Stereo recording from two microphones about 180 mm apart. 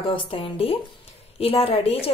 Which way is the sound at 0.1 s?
30° left (ahead or behind).